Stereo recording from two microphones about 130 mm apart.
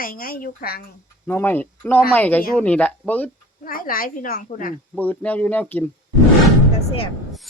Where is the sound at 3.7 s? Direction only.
90° left.